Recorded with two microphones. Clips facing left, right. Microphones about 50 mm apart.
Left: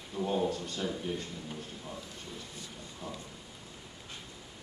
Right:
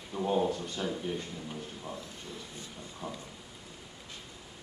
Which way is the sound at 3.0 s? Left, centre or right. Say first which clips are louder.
Right 2 dB; centre.